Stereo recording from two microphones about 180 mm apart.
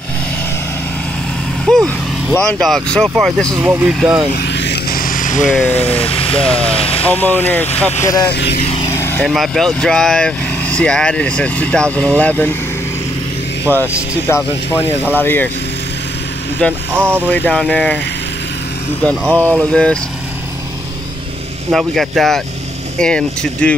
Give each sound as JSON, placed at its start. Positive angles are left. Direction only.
{"t": 1.7, "sound": "speech", "side_deg": 0}
{"t": 4.4, "sound": "vehicle", "side_deg": 70}
{"t": 5.7, "sound": "speech", "side_deg": 35}
{"t": 7.0, "sound": "speech", "side_deg": 10}
{"t": 8.3, "sound": "speech", "side_deg": 70}
{"t": 8.8, "sound": "vehicle", "side_deg": 15}
{"t": 9.3, "sound": "speech", "side_deg": 0}
{"t": 13.7, "sound": "speech", "side_deg": 15}
{"t": 16.9, "sound": "speech", "side_deg": -10}
{"t": 17.3, "sound": "speech", "side_deg": 5}
{"t": 19.4, "sound": "speech", "side_deg": -15}
{"t": 19.7, "sound": "speech", "side_deg": 5}
{"t": 21.7, "sound": "speech", "side_deg": 0}